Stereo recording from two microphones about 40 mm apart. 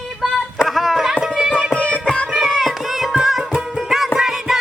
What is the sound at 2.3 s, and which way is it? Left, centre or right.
Music, centre.